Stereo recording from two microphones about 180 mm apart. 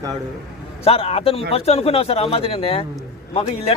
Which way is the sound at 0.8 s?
35° left (ahead or behind).